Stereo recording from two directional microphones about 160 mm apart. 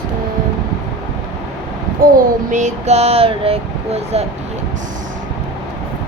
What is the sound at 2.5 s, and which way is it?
Female singing, 50° right (ahead or behind).